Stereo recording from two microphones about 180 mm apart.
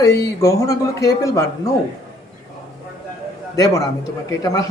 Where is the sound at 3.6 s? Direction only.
20° left (ahead or behind).